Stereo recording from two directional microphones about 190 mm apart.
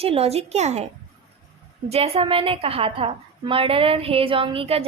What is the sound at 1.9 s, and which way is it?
A woman's voice, 30° right (ahead or behind).